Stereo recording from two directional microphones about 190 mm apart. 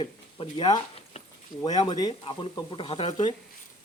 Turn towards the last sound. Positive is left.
turn(degrees=35)  # may be behind; listen again after turning